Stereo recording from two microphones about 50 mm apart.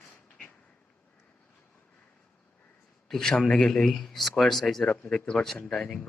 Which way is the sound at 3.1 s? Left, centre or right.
Centre.